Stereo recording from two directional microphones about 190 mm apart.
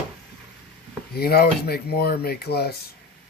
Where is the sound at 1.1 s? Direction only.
55° left (ahead or behind).